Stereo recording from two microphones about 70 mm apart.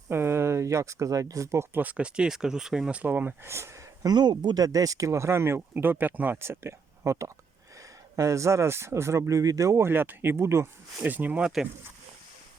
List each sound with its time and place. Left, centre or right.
0.1 s speech: right
1.8 s speech: centre
3.4 s speech: right
4.0 s speech: right
6.4 s speech: right
9.8 s speech: right
11.0 s speech: right